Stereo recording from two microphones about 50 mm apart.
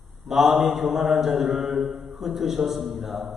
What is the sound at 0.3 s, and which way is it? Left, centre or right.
Speech, centre.